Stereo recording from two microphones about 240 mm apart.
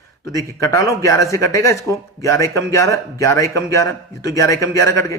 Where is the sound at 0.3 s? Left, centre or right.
Centre.